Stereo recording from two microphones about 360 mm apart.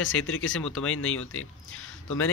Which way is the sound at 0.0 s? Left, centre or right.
Left.